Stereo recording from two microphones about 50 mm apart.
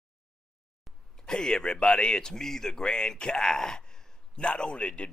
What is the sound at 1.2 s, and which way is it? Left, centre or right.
A man's voice, centre.